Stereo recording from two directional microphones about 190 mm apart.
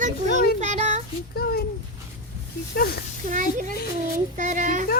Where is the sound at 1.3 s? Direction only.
55° left (ahead or behind).